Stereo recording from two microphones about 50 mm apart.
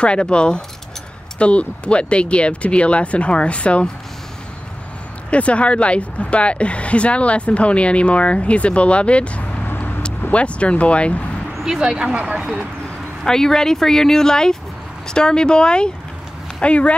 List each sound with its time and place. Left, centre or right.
0.0 s speech: left
5.3 s speech: left
9.7 s vehicle: left
10.3 s speech: left
11.5 s a sound: centre
11.8 s speech: centre
13.2 s speech: centre